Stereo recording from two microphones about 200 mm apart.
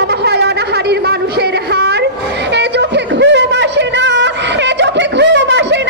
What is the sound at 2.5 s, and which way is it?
Music, 60° right (ahead or behind).